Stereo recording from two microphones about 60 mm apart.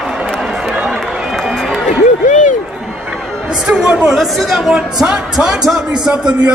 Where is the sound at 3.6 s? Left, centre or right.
Centre.